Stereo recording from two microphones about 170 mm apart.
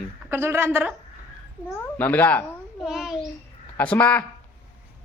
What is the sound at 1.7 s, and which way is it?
Speech, 10° left (ahead or behind).